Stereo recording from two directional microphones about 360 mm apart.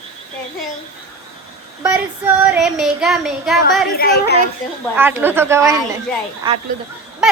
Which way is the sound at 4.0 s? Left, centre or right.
Left.